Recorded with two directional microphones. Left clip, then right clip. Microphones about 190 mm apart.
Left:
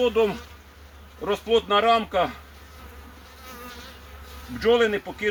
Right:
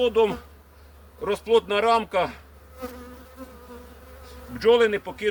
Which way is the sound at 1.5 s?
30° right (ahead or behind).